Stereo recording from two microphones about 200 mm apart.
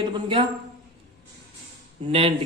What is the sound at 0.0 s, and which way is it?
Speech, 25° right (ahead or behind).